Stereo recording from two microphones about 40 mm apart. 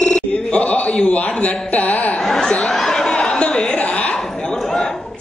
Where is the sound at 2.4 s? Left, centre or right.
Left.